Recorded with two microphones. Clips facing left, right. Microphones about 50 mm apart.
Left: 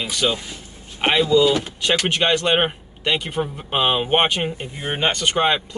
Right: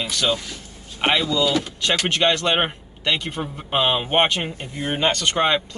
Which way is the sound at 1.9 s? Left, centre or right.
Centre.